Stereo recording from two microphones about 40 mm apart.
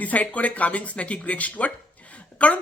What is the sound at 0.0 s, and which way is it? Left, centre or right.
Speech, left.